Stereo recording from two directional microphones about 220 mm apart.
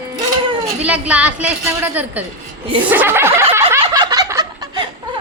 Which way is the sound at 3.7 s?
15° right (ahead or behind).